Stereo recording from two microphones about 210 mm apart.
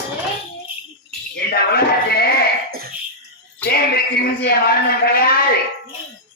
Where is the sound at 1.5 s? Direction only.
50° left (ahead or behind).